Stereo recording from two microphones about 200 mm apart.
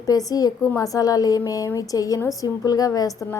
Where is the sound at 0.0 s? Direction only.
15° left (ahead or behind).